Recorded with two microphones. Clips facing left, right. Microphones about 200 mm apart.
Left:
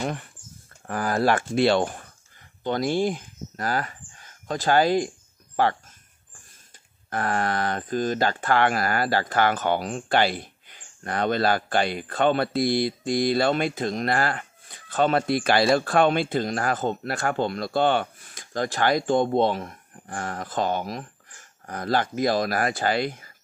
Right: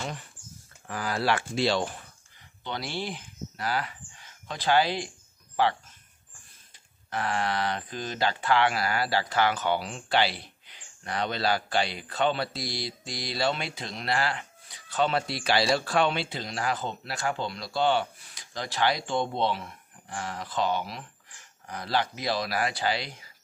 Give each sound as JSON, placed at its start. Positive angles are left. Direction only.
{"t": 0.8, "sound": "speech", "side_deg": 50}
{"t": 7.1, "sound": "speech", "side_deg": 50}